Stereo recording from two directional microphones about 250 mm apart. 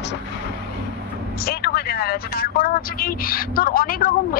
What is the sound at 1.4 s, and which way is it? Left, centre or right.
A woman's voice, left.